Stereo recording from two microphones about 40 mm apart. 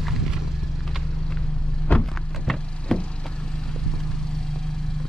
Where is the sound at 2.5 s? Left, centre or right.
Left.